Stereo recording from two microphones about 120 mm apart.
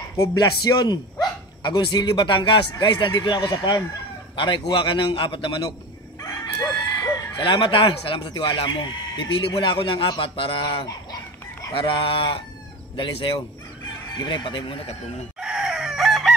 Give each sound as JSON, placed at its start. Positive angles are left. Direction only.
{"t": 0.4, "sound": "speech", "side_deg": 35}
{"t": 6.2, "sound": "chicken", "side_deg": 35}
{"t": 7.3, "sound": "speech", "side_deg": 45}
{"t": 15.4, "sound": "chicken", "side_deg": -5}